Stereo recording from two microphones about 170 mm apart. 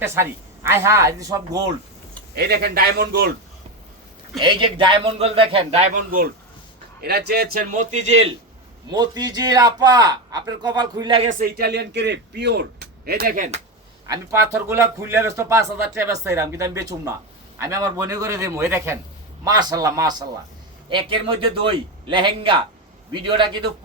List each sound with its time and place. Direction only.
0.0 s speech: 15° right (ahead or behind)
2.3 s speech: 70° right (ahead or behind)
4.4 s a man's voice: 30° right (ahead or behind)
5.9 s a man's voice: 60° right (ahead or behind)
7.0 s a man's voice: 70° right (ahead or behind); by 8.3 s 40° right (ahead or behind)
8.9 s a man's voice: 25° right (ahead or behind)
11.3 s speech: 55° right (ahead or behind)
14.1 s a man's voice: 15° right (ahead or behind)